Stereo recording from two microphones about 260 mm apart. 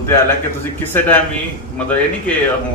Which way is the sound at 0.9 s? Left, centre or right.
Centre.